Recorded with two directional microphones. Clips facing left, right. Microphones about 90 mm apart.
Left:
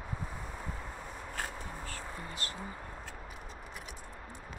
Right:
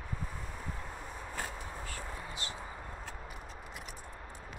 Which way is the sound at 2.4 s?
45° left (ahead or behind).